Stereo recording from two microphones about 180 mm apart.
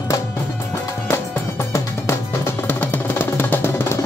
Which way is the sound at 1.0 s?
15° left (ahead or behind).